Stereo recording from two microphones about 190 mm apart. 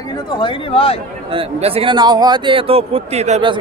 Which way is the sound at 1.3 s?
30° right (ahead or behind).